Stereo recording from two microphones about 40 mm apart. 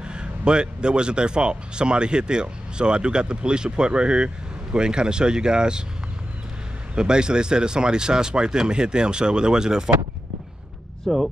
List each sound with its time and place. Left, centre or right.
0.0 s speech: right
7.0 s speech: right
11.1 s speech: centre